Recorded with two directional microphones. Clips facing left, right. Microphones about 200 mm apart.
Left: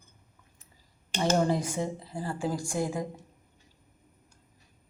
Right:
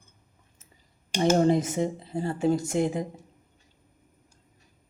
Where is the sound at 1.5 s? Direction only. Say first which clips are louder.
Right 6 dB; 20° right (ahead or behind).